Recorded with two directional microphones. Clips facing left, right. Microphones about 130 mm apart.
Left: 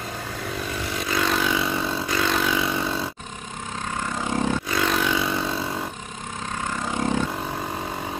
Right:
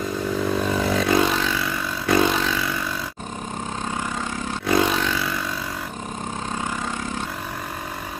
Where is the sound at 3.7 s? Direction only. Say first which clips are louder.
Even; 30° right (ahead or behind).